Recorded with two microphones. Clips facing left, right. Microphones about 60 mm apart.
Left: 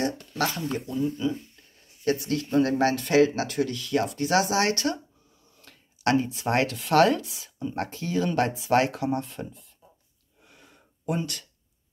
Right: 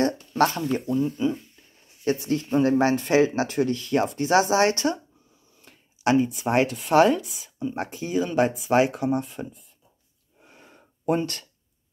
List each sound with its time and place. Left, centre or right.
0.4 s speech: right
2.0 s speech: right
5.6 s speech: centre
10.4 s gasp: right